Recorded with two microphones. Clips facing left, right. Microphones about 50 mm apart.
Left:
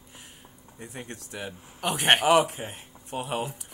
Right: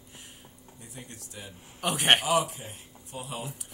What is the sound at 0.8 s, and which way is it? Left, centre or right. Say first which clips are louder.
Speech: left 7 dB; left.